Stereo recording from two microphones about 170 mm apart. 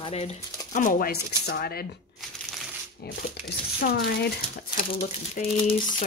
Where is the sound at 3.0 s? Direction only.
70° left (ahead or behind).